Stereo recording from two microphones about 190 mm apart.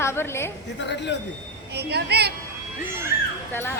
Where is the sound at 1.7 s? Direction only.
60° right (ahead or behind).